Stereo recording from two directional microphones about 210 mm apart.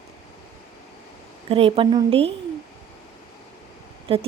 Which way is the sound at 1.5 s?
25° right (ahead or behind).